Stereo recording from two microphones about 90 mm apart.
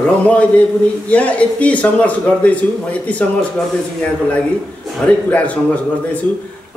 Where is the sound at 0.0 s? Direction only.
15° left (ahead or behind).